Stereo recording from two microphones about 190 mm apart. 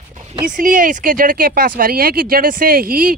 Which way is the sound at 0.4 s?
45° right (ahead or behind).